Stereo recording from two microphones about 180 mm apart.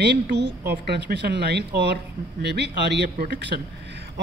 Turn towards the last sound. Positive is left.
turn(degrees=-70)  # may be behind; listen again after turning